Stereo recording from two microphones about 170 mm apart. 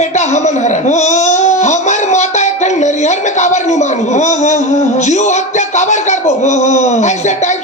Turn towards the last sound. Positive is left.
turn(degrees=45)  # may be behind; listen again after turning